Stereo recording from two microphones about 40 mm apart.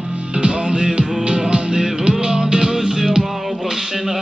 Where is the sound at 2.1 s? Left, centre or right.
Centre.